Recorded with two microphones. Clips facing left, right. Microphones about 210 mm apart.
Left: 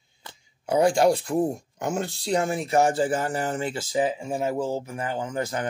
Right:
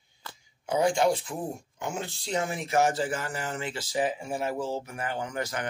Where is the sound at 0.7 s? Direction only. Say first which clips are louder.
Left 5 dB; 35° left (ahead or behind).